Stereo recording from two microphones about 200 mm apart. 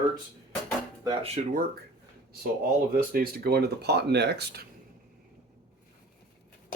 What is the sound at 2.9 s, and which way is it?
Speech, 50° right (ahead or behind).